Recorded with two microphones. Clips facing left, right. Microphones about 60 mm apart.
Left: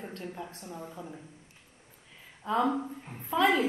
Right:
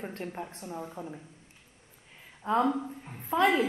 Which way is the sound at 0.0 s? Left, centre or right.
Right.